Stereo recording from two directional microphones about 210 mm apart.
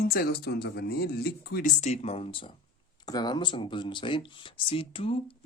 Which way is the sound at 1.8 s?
30° left (ahead or behind).